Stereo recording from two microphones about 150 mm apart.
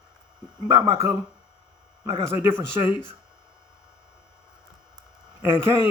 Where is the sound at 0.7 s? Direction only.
20° right (ahead or behind).